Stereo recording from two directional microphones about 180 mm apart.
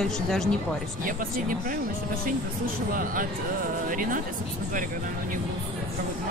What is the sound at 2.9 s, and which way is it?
Speech, 50° right (ahead or behind).